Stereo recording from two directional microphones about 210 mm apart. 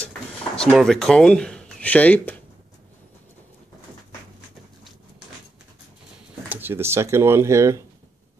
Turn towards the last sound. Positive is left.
turn(degrees=-15)  # may be behind; listen again after turning